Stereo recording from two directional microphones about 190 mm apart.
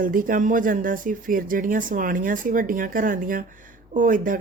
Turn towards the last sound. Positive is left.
turn(degrees=-45)  # may be behind; listen again after turning